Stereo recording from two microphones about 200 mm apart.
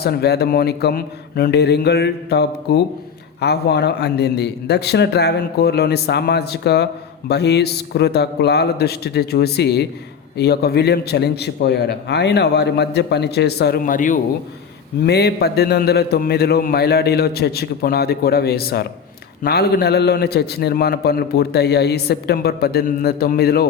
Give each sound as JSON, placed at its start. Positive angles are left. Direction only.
{"t": 0.0, "sound": "a man's voice", "side_deg": 55}
{"t": 15.0, "sound": "a man's voice", "side_deg": 55}